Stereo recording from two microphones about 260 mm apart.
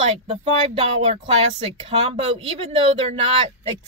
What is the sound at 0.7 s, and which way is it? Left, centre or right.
Speech, right.